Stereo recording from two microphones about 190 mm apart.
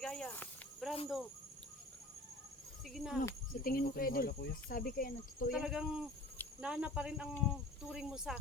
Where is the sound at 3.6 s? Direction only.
50° left (ahead or behind).